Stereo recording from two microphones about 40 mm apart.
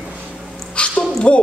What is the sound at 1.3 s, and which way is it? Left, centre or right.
Speech, left.